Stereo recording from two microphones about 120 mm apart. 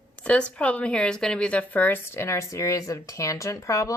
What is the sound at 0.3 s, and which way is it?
Speech, 10° left (ahead or behind).